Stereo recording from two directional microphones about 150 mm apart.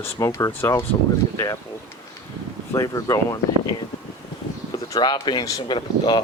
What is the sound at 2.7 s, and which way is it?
Speech, 20° left (ahead or behind).